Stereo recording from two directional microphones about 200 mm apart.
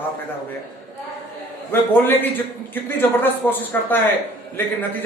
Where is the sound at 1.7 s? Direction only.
10° left (ahead or behind).